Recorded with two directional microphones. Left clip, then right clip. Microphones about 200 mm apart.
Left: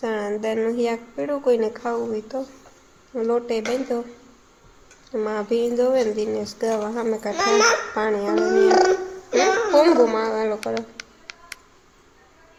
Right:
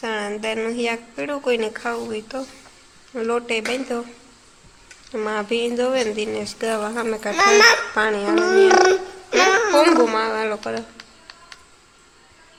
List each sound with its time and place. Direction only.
0.0 s a woman's voice: 25° left (ahead or behind)
5.1 s speech: 10° left (ahead or behind)
6.7 s speech: centre (ahead or behind)
7.3 s speech: 35° right (ahead or behind)
7.9 s speech: 10° left (ahead or behind)
8.4 s speech: 30° right (ahead or behind)
9.5 s a sound: 35° right (ahead or behind)
9.8 s speech: 15° left (ahead or behind)